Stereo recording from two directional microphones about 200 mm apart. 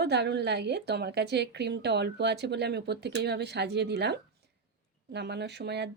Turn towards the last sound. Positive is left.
turn(degrees=-55)  # may be behind; listen again after turning